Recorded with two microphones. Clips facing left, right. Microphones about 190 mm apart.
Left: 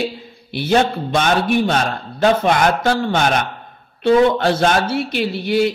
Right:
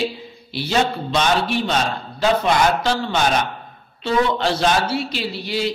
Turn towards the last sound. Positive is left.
turn(degrees=55)  # may be behind; listen again after turning